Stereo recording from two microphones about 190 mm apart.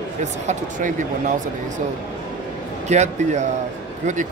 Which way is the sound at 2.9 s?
40° right (ahead or behind).